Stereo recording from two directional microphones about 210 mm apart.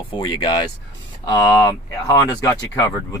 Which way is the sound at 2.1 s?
15° left (ahead or behind).